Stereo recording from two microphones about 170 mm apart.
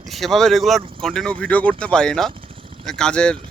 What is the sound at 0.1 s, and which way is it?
Speech, centre (ahead or behind).